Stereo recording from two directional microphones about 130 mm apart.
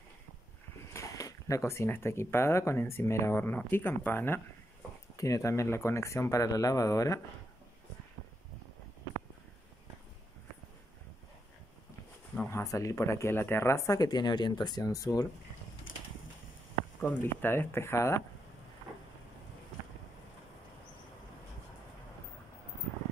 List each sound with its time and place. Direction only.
0.9 s speech: 25° left (ahead or behind)
12.4 s speech: 20° left (ahead or behind)
17.0 s speech: 15° left (ahead or behind)